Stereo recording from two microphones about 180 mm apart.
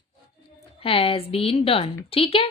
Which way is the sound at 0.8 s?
30° left (ahead or behind).